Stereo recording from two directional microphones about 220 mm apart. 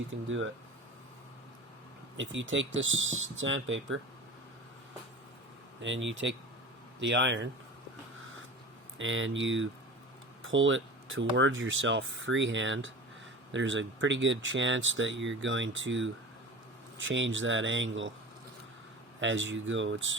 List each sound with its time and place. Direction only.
0.3 s speech: 60° right (ahead or behind)
2.1 s speech: 60° right (ahead or behind)
5.8 s speech: 55° right (ahead or behind)
9.0 s speech: 60° right (ahead or behind)
19.2 s speech: 55° right (ahead or behind)